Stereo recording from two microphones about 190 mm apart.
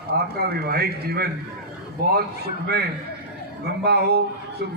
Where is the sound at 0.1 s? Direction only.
55° right (ahead or behind).